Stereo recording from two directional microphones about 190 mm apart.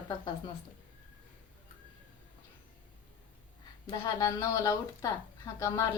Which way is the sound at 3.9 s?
20° left (ahead or behind).